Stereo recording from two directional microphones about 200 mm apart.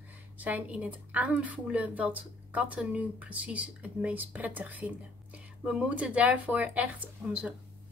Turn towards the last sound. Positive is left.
turn(degrees=-5)  # may be behind; listen again after turning